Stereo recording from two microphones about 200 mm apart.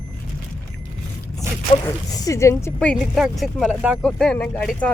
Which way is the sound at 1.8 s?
15° left (ahead or behind).